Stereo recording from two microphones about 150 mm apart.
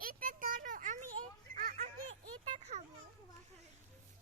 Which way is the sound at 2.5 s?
50° right (ahead or behind).